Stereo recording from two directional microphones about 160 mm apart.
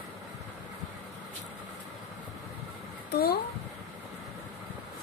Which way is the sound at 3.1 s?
75° left (ahead or behind).